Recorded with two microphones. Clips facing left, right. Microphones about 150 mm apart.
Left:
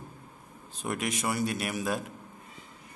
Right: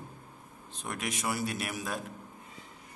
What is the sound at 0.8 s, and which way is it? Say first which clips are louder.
A man's voice: left 4 dB; centre (ahead or behind).